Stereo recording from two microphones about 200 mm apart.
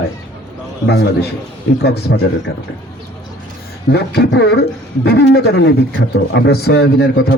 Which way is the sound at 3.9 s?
60° left (ahead or behind).